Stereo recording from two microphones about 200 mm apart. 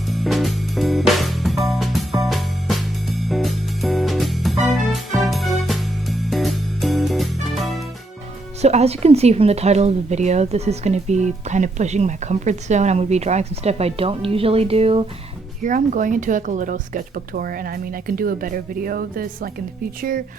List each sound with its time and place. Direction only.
0.1 s music: centre (ahead or behind)
8.6 s speech: 30° right (ahead or behind)
15.6 s speech: 40° right (ahead or behind)